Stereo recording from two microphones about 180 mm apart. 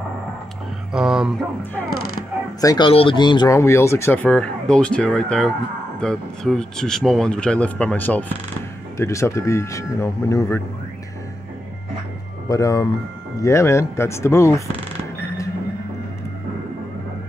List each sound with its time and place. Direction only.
0.9 s speech: 5° right (ahead or behind)
2.6 s speech: 20° left (ahead or behind)
12.4 s speech: 20° left (ahead or behind)